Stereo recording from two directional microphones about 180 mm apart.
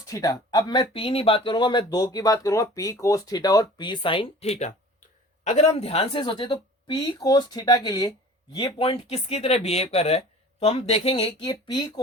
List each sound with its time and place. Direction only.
0.1 s speech: 20° left (ahead or behind)